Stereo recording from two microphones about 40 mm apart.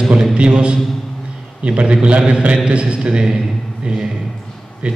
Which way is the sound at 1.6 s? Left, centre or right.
Right.